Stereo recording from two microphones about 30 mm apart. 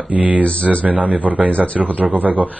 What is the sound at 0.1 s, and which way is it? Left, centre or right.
Speech, right.